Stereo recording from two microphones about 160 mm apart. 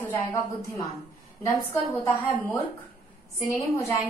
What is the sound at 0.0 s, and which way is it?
Speech, 15° left (ahead or behind).